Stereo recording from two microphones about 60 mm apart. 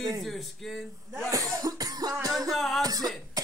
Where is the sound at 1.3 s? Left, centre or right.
Right.